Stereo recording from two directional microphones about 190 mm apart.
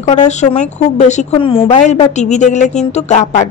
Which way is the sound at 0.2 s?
40° left (ahead or behind).